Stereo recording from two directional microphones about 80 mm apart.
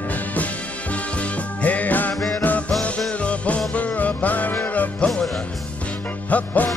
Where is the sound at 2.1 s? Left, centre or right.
Centre.